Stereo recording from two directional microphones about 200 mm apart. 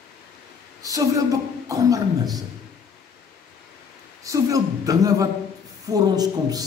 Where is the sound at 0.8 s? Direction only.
15° right (ahead or behind).